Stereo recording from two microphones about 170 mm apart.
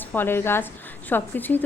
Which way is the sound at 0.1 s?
10° left (ahead or behind).